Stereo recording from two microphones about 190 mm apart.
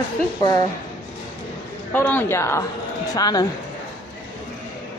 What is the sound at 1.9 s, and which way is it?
A woman's voice, 10° left (ahead or behind).